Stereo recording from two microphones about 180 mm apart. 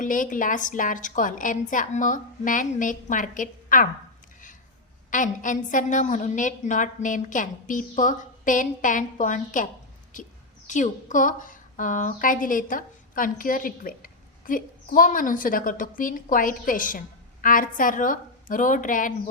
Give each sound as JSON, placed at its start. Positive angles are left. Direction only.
{"t": 0.0, "sound": "a woman's voice", "side_deg": 45}
{"t": 5.1, "sound": "a woman's voice", "side_deg": 45}